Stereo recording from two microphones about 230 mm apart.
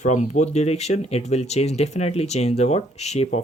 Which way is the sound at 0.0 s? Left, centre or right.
Left.